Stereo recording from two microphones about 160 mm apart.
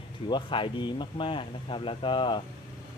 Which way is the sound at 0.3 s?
30° left (ahead or behind).